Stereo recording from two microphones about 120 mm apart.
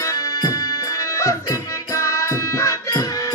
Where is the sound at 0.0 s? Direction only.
25° left (ahead or behind).